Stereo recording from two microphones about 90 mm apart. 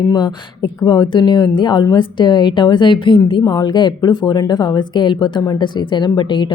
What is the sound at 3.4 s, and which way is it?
A woman's voice, 50° left (ahead or behind).